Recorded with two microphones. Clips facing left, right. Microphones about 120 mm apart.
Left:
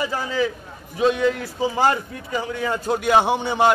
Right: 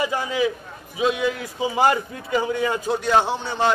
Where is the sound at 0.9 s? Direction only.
5° right (ahead or behind).